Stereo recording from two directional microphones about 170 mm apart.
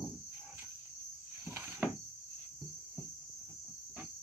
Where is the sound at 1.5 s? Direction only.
15° right (ahead or behind).